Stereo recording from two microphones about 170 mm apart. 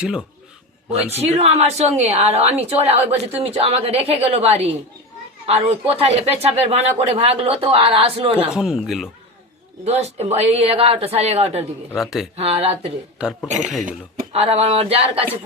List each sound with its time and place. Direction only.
0.0 s speech: 5° right (ahead or behind)
1.2 s a woman's voice: 40° right (ahead or behind)
8.5 s speech: 5° right (ahead or behind)
9.8 s a woman's voice: 40° right (ahead or behind)
11.9 s speech: centre (ahead or behind)
12.4 s a woman's voice: 35° right (ahead or behind)
13.1 s speech: 5° right (ahead or behind)
14.3 s a woman's voice: 40° right (ahead or behind)